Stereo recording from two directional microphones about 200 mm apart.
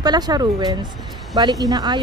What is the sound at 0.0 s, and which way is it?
Speech, 20° right (ahead or behind).